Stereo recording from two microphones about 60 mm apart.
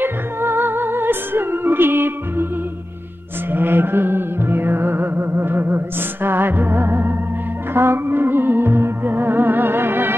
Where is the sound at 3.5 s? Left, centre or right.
Right.